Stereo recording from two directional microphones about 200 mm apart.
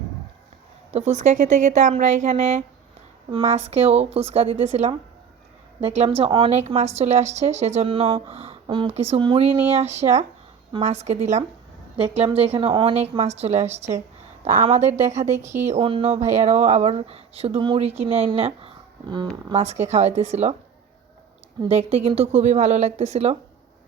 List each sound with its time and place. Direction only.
0.9 s speech: 35° right (ahead or behind)
21.6 s speech: 30° right (ahead or behind)